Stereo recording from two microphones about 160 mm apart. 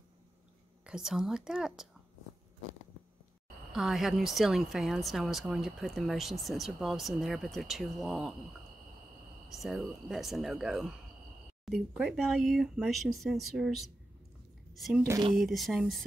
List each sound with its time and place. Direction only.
0.8 s a woman's voice: 5° right (ahead or behind)
3.7 s a woman's voice: centre (ahead or behind)
9.5 s a woman's voice: centre (ahead or behind)